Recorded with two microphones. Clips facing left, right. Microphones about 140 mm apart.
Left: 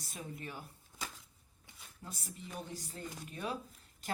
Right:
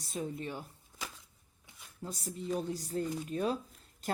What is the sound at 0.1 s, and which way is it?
Speech, 30° right (ahead or behind).